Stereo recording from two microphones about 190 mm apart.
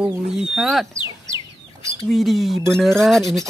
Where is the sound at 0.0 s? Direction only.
5° right (ahead or behind).